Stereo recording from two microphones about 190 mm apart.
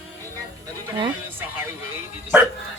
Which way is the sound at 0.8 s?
20° right (ahead or behind).